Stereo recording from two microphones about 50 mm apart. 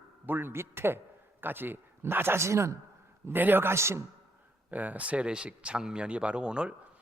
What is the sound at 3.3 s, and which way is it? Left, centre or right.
Speech, right.